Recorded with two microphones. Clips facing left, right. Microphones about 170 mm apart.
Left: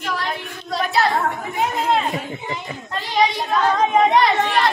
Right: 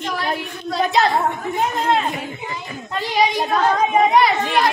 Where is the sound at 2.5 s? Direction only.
20° left (ahead or behind).